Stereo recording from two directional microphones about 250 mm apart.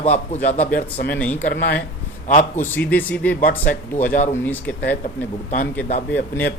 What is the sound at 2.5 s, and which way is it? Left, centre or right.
Speech, centre.